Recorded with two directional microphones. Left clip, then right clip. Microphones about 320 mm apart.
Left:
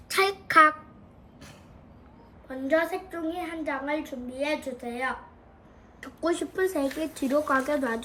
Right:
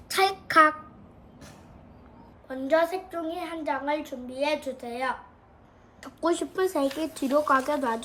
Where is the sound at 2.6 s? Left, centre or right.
Centre.